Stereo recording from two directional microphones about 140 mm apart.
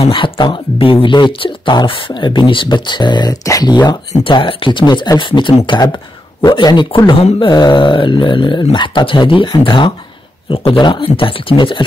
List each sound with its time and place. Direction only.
0.0 s speech: 35° left (ahead or behind)